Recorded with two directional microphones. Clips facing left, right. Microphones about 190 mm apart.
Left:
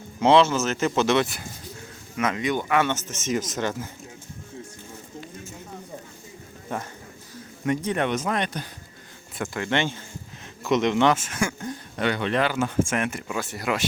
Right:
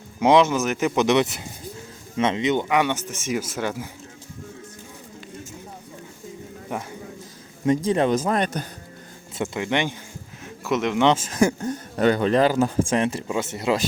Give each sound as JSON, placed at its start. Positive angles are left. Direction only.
{"t": 0.2, "sound": "speech", "side_deg": -15}
{"t": 6.7, "sound": "speech", "side_deg": -10}
{"t": 7.9, "sound": "speech", "side_deg": -30}
{"t": 9.3, "sound": "speech", "side_deg": -25}
{"t": 11.1, "sound": "speech", "side_deg": -35}